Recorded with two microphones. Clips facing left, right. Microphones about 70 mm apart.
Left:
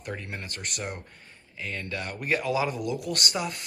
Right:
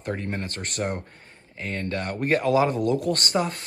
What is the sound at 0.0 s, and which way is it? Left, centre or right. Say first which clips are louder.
Speech: right 7 dB; right.